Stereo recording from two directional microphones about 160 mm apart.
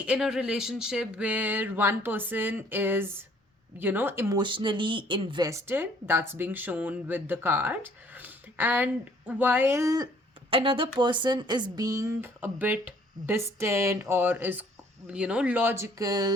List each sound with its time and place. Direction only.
0.0 s speech: 5° right (ahead or behind)
4.4 s speech: 30° right (ahead or behind)
10.5 s speech: 35° right (ahead or behind)